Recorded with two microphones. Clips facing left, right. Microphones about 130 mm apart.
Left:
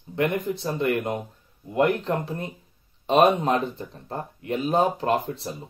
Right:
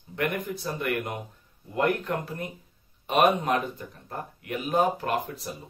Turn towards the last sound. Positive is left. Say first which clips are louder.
# left 5 dB
turn(degrees=30)  # may be behind; listen again after turning